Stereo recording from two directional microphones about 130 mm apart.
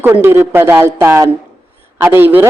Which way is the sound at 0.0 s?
15° right (ahead or behind).